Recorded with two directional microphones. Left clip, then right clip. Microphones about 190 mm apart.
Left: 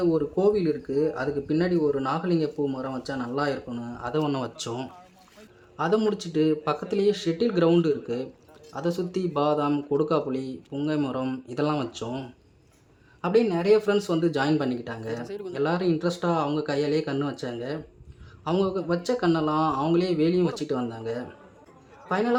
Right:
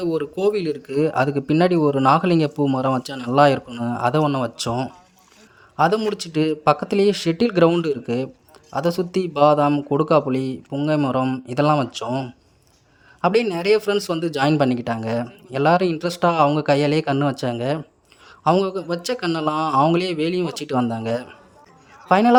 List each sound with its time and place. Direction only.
0.0 s speech: 45° right (ahead or behind)
4.3 s a man's voice: 25° right (ahead or behind); by 22.4 s 40° right (ahead or behind)